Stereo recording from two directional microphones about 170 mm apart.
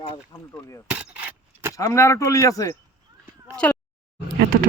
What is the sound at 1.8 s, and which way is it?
Speech, 15° left (ahead or behind).